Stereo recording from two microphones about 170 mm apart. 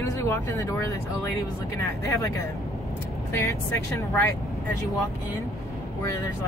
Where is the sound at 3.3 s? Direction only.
15° left (ahead or behind).